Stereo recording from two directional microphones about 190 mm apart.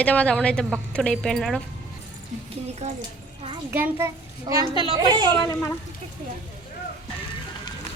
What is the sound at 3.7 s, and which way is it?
A child's voice, 10° right (ahead or behind).